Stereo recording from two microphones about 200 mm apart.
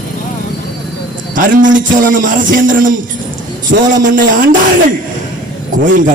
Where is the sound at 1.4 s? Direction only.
40° right (ahead or behind).